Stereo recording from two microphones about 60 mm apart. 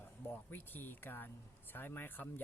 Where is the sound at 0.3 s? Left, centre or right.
Left.